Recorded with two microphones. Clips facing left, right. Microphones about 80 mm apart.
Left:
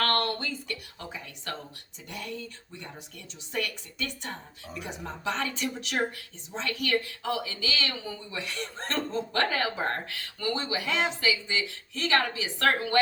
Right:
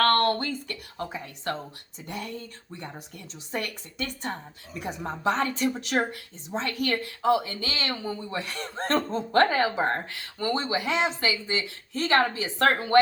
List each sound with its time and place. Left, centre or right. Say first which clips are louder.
0.0 s a woman's voice: right 6 dB; right
3.5 s a woman's voice: right 1 dB; right